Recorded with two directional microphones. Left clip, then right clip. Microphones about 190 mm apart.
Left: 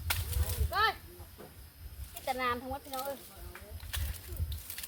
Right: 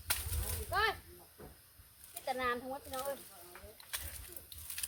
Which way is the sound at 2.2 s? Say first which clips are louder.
Left 3 dB; centre (ahead or behind).